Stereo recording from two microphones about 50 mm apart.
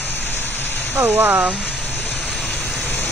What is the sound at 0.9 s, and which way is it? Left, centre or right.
Speech, right.